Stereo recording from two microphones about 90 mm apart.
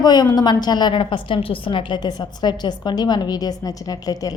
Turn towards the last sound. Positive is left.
turn(degrees=45)  # may be behind; listen again after turning